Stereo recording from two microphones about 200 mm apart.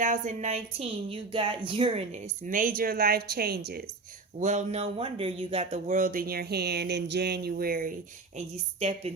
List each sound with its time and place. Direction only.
0.0 s a woman's voice: 40° right (ahead or behind)
4.4 s speech: 35° right (ahead or behind)